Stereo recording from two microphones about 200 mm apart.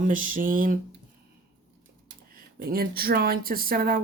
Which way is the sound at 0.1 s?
40° right (ahead or behind).